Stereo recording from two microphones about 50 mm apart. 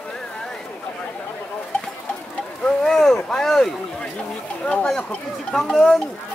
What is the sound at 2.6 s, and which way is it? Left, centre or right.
Speech, centre.